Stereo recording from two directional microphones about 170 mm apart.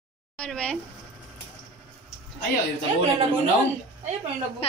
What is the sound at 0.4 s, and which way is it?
Speech, 5° left (ahead or behind).